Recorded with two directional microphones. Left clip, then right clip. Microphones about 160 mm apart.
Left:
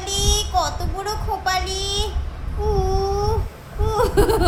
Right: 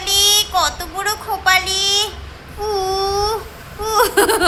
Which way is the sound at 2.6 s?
10° left (ahead or behind).